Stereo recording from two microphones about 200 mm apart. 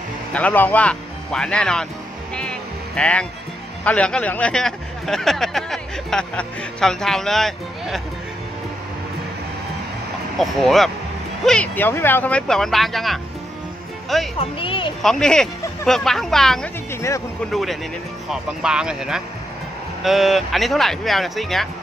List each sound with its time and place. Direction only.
0.3 s speech: 10° left (ahead or behind)
3.0 s speech: 5° left (ahead or behind)
10.4 s speech: centre (ahead or behind)
14.4 s speech: 25° left (ahead or behind)
15.0 s speech: centre (ahead or behind)